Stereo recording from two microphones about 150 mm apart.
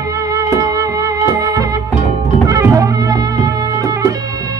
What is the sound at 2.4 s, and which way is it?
Music, 20° right (ahead or behind).